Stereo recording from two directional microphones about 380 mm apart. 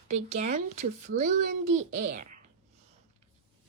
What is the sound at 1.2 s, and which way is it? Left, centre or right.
Speech, right.